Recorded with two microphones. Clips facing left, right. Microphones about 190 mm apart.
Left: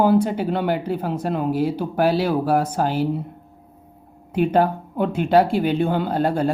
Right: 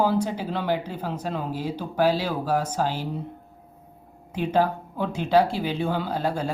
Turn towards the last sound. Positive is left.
turn(degrees=55)  # may be behind; listen again after turning